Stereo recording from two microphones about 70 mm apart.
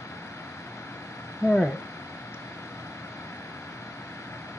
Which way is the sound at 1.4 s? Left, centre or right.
Left.